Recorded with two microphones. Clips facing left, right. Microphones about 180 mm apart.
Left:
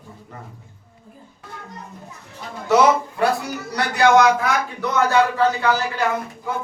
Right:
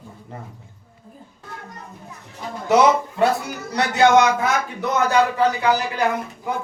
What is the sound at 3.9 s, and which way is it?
A man's voice, 25° right (ahead or behind).